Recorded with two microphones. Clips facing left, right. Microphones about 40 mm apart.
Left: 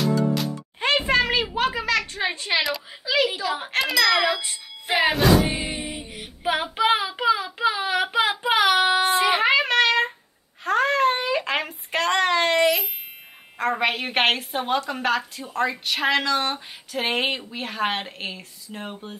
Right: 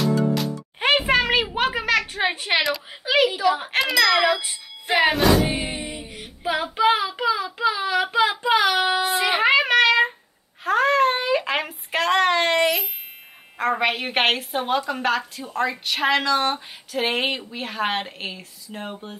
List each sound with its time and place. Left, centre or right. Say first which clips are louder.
0.0 s music: right 1 dB; centre
0.7 s a sound: right 2 dB; centre
3.3 s a woman's voice: right 4 dB; centre
6.4 s child singing: right 2 dB; centre
10.6 s a sound: right 2 dB; centre
13.6 s a woman's voice: right 1 dB; centre